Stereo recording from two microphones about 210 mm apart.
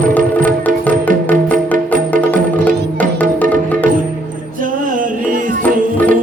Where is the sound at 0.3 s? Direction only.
5° left (ahead or behind).